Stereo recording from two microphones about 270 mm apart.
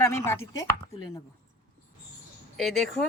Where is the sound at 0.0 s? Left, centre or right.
Centre.